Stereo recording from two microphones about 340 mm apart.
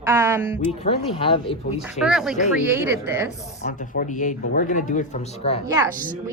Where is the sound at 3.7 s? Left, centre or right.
Left.